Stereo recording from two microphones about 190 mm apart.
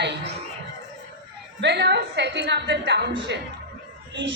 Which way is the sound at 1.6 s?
65° right (ahead or behind).